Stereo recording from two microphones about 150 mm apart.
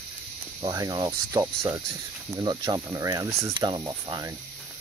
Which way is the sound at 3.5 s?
30° right (ahead or behind).